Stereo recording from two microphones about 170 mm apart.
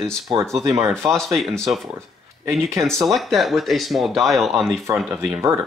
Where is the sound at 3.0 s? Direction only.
Centre (ahead or behind).